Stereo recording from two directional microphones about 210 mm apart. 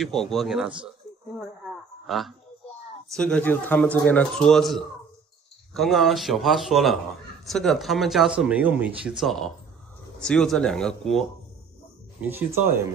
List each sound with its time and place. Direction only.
0.0 s speech: centre (ahead or behind)
2.0 s speech: centre (ahead or behind)
12.2 s speech: 10° right (ahead or behind)